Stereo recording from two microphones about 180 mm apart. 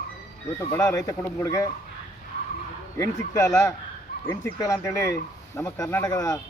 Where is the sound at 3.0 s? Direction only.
15° left (ahead or behind).